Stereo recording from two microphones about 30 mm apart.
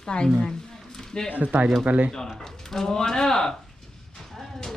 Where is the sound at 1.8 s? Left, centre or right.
Right.